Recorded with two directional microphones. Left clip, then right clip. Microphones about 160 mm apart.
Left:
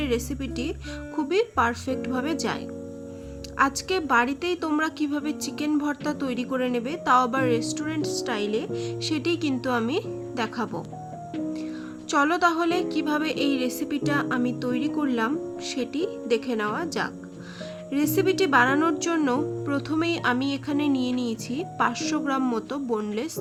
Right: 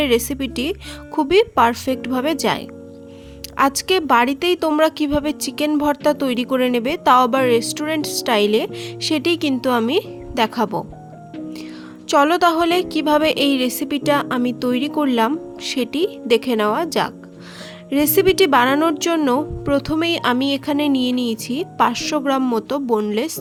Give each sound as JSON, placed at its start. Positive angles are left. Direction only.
{"t": 0.0, "sound": "a woman's voice", "side_deg": -50}
{"t": 12.0, "sound": "a woman's voice", "side_deg": -45}